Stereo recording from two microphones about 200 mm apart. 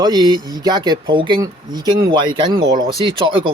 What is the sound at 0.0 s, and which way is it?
Speech, 20° right (ahead or behind).